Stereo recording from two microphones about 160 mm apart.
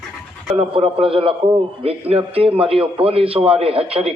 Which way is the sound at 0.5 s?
35° right (ahead or behind).